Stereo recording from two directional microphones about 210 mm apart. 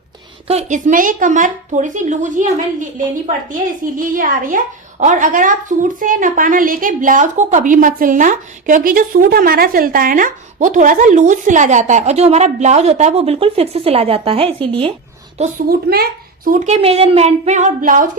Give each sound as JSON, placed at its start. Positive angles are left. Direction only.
{"t": 0.4, "sound": "a woman's voice", "side_deg": -35}
{"t": 15.4, "sound": "a woman's voice", "side_deg": -40}